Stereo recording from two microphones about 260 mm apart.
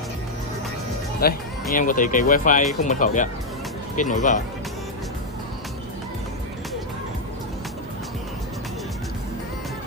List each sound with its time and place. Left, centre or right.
1.2 s speech: left